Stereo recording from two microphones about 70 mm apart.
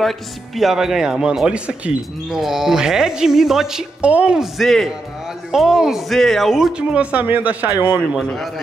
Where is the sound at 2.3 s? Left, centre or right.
Centre.